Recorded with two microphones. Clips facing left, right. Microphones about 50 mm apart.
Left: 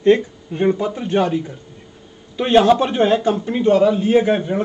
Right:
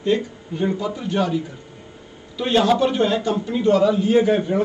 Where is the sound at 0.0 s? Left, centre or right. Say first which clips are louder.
Left 7 dB; left.